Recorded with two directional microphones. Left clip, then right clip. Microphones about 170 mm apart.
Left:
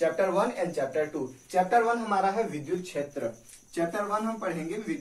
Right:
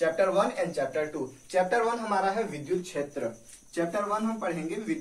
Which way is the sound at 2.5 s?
Centre (ahead or behind).